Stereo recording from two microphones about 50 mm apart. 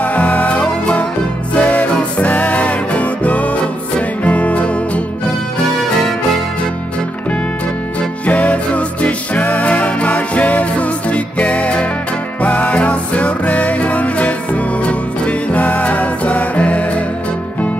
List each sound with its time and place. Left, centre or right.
0.0 s music: left
8.3 s music: left